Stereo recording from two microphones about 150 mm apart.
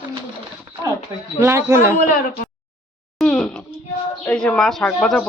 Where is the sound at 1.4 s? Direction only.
15° right (ahead or behind).